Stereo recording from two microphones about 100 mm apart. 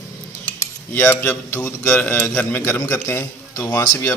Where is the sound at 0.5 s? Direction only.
25° left (ahead or behind).